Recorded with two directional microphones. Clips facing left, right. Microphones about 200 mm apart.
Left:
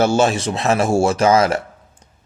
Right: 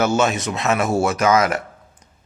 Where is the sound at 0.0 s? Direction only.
30° left (ahead or behind).